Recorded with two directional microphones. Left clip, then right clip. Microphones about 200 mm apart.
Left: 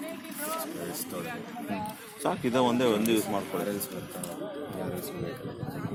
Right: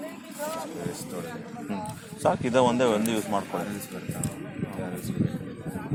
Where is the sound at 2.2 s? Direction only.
40° right (ahead or behind).